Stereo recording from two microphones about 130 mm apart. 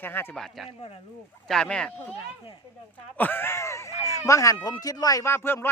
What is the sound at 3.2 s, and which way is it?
Speech, 15° left (ahead or behind).